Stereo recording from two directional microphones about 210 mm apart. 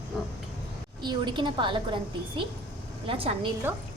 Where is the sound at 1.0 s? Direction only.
20° right (ahead or behind).